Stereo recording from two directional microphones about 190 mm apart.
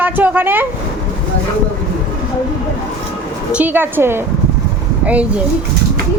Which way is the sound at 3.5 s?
10° right (ahead or behind).